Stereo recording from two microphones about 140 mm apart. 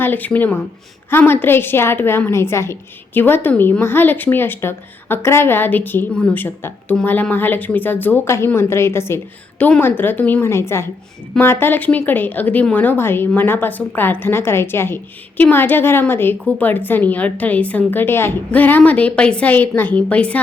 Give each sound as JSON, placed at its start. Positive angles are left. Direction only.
{"t": 0.0, "sound": "a woman's voice", "side_deg": 10}